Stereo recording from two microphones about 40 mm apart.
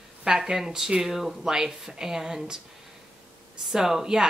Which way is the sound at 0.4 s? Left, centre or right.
Centre.